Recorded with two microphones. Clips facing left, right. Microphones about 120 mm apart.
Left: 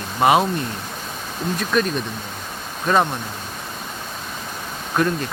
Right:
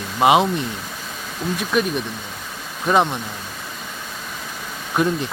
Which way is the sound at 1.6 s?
15° right (ahead or behind).